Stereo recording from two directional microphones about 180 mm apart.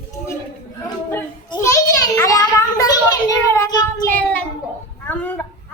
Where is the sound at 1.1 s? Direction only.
15° left (ahead or behind).